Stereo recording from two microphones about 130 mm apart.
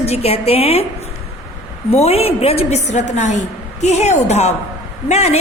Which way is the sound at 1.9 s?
50° left (ahead or behind).